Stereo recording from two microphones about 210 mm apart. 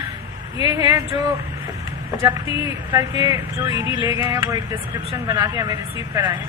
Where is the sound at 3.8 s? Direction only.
25° left (ahead or behind).